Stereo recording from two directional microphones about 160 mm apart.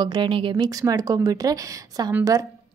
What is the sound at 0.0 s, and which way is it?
Speech, 30° right (ahead or behind).